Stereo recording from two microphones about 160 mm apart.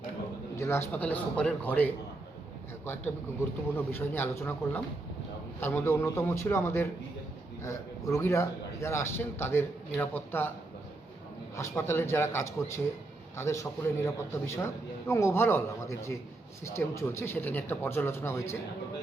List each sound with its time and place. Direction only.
0.5 s a man's voice: 20° left (ahead or behind)
3.8 s a man's voice: 15° left (ahead or behind)
11.8 s a man's voice: 15° left (ahead or behind)